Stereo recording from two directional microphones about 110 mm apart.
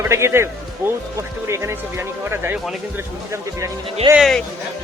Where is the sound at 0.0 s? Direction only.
25° right (ahead or behind).